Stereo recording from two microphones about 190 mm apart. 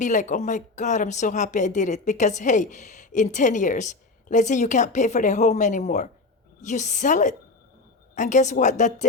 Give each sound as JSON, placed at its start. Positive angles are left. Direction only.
{"t": 0.0, "sound": "speech", "side_deg": 40}